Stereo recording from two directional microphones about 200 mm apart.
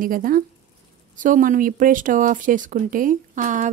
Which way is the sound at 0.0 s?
45° right (ahead or behind).